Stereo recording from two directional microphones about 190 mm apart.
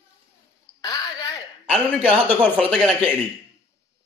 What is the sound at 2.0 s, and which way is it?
Speech, 5° left (ahead or behind).